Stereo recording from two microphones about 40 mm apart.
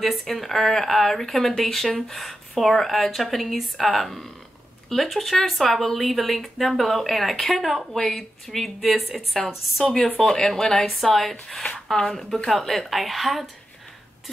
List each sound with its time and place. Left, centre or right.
0.0 s speech: centre